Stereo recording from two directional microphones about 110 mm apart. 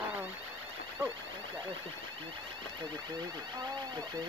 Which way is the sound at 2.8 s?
40° right (ahead or behind).